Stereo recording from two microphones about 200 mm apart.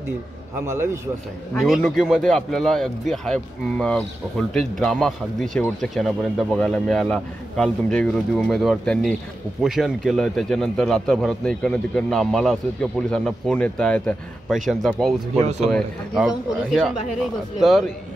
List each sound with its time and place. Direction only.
0.7 s a man's voice: 15° right (ahead or behind)
1.5 s speech: centre (ahead or behind)
15.3 s speech: 35° right (ahead or behind)
15.7 s speech: centre (ahead or behind)